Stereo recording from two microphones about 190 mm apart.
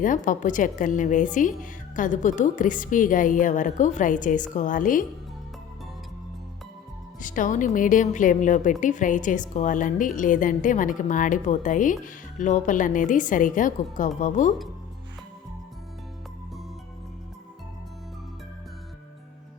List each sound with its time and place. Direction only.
0.0 s a woman's voice: 45° left (ahead or behind)
7.2 s a woman's voice: 45° left (ahead or behind)